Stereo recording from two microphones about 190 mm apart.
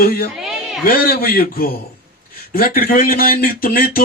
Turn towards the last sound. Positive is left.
turn(degrees=50)  # may be behind; listen again after turning